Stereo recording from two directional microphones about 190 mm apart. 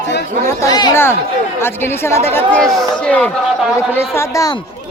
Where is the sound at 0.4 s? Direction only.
20° left (ahead or behind).